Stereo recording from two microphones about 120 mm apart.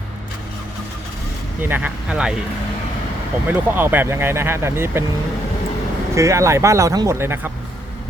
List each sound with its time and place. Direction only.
1.6 s speech: 15° right (ahead or behind)
3.4 s speech: 15° right (ahead or behind)
6.1 s speech: 25° right (ahead or behind)
7.2 s speech: 20° right (ahead or behind)